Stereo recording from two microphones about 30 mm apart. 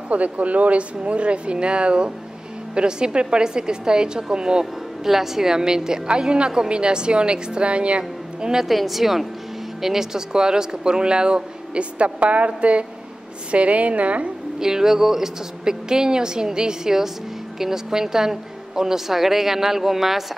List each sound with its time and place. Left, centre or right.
0.1 s speech: right
5.0 s speech: centre; by 8.0 s right
8.6 s a woman's voice: centre; by 11.8 s right
11.8 s a woman's voice: right
14.6 s a woman's voice: centre